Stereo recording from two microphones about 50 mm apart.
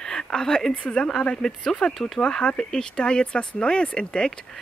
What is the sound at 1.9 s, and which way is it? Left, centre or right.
Speech, centre.